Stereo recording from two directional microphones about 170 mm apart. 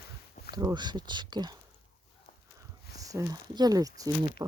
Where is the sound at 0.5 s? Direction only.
25° right (ahead or behind).